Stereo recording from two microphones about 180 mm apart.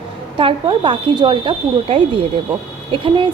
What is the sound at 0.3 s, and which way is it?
Speech, 30° right (ahead or behind).